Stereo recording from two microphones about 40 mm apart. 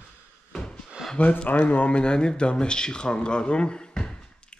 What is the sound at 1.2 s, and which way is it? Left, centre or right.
Speech, left.